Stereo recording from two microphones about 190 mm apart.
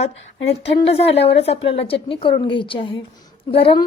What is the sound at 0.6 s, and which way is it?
A woman's voice, 30° left (ahead or behind).